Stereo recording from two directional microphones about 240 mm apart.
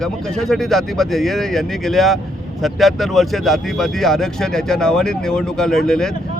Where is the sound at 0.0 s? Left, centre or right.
Centre.